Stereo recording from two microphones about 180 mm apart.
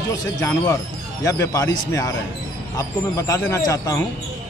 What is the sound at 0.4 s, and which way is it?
A man's voice, 15° left (ahead or behind).